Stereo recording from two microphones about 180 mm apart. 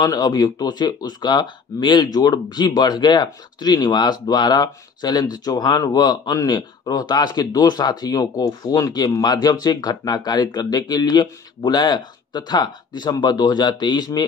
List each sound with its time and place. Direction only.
0.0 s speech: 20° left (ahead or behind)